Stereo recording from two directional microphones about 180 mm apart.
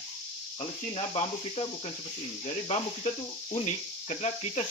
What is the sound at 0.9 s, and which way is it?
Speech, 35° left (ahead or behind).